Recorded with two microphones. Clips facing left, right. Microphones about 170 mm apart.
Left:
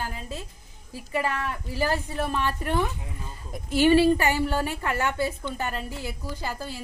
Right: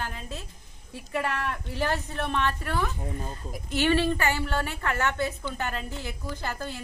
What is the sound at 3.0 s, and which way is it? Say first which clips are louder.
Speech: right 6 dB; 45° right (ahead or behind).